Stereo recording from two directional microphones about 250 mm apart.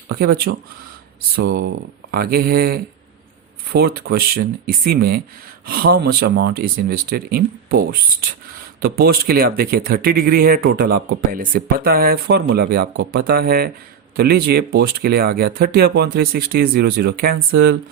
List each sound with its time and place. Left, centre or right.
0.1 s speech: right